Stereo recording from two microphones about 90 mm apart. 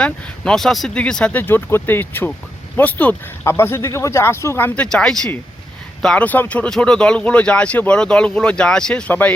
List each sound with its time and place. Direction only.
0.0 s speech: 5° left (ahead or behind); by 4.7 s 25° left (ahead or behind)
4.7 s speech: 10° left (ahead or behind)
6.2 s speech: 20° left (ahead or behind)